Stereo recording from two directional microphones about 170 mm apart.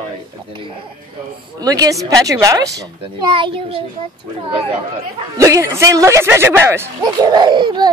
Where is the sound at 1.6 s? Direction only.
20° right (ahead or behind).